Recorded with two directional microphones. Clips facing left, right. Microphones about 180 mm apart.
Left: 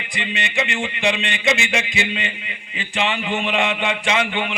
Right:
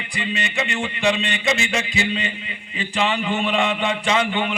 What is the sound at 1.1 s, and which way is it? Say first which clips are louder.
A man's voice: left 1 dB; 35° right (ahead or behind).